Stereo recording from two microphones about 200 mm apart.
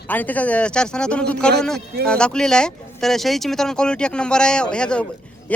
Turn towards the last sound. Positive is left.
turn(degrees=5)  # may be behind; listen again after turning